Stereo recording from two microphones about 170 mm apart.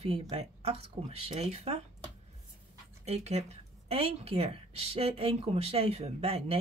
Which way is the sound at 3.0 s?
40° right (ahead or behind).